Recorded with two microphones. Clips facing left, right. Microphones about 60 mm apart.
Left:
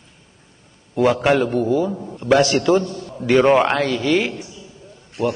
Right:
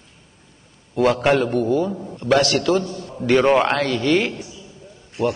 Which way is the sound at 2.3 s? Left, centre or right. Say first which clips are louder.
Left 2 dB; centre.